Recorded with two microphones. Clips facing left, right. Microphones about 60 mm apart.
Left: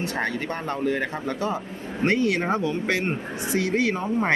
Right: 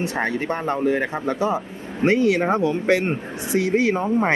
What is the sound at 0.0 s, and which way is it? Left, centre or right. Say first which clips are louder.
Speech: right 3 dB; right.